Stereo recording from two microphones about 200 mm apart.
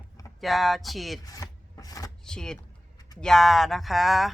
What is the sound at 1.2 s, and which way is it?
Speech, 20° left (ahead or behind).